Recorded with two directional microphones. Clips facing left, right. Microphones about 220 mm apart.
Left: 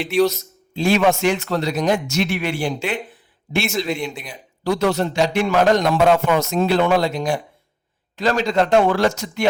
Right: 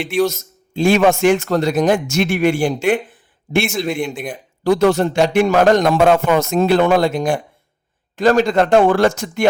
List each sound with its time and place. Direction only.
0.3 s a man's voice: 50° right (ahead or behind)